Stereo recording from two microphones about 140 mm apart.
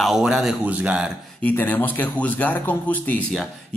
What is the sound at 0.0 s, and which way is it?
Speech, 5° right (ahead or behind).